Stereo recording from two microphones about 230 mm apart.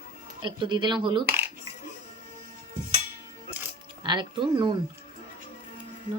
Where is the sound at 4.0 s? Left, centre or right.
Centre.